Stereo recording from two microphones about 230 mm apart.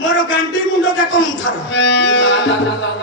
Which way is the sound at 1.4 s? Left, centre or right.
Left.